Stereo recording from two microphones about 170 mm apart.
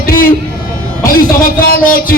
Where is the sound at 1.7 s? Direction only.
55° left (ahead or behind).